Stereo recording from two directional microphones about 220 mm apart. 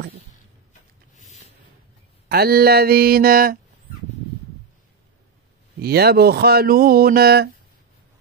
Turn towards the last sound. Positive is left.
turn(degrees=-45)  # may be behind; listen again after turning